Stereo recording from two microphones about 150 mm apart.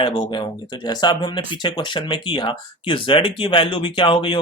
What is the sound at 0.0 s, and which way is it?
Speech, 30° left (ahead or behind).